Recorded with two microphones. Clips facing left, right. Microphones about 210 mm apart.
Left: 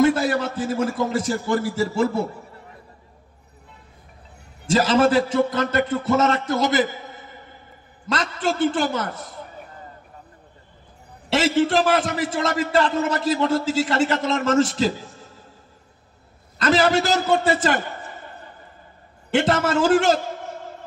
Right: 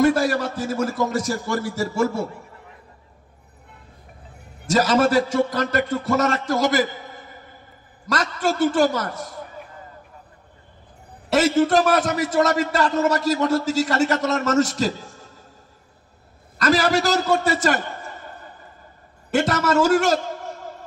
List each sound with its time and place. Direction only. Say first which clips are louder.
0.0 s a man's voice: even; 25° left (ahead or behind)
4.6 s a man's voice: left 1 dB; 25° left (ahead or behind)
8.1 s a man's voice: right 1 dB; 25° left (ahead or behind)
11.2 s a man's voice: right 2 dB; 25° left (ahead or behind)
16.5 s a man's voice: left 1 dB; 25° left (ahead or behind)
19.3 s a man's voice: even; 30° left (ahead or behind)